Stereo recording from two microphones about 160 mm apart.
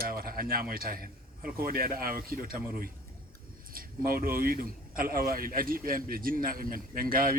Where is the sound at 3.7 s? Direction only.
65° right (ahead or behind).